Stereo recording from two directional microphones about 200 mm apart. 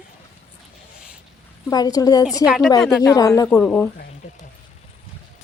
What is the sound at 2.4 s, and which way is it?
Speech, centre (ahead or behind).